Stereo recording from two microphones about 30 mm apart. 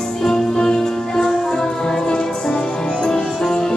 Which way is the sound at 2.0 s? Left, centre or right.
Left.